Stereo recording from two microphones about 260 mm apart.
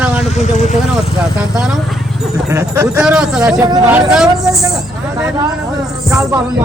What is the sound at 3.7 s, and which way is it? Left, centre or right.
Speech, centre.